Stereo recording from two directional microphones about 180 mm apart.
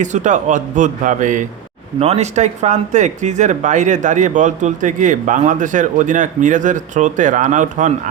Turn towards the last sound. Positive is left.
turn(degrees=-45)  # may be behind; listen again after turning